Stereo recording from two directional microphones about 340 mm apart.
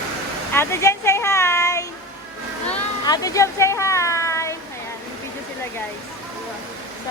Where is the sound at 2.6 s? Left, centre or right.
Centre.